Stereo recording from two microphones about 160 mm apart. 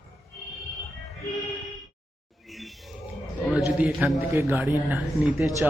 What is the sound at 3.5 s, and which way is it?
A man's voice, 5° right (ahead or behind).